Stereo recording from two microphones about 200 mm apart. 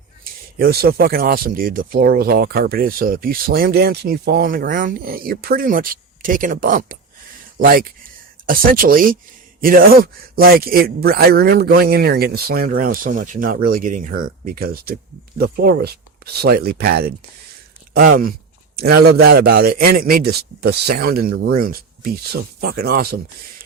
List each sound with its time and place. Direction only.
0.6 s speech: 50° right (ahead or behind)